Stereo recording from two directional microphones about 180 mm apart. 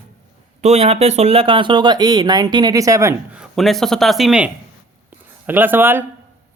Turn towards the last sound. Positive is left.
turn(degrees=-10)  # may be behind; listen again after turning